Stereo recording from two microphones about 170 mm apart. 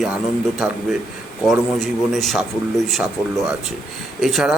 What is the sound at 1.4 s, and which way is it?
A man's voice, centre (ahead or behind).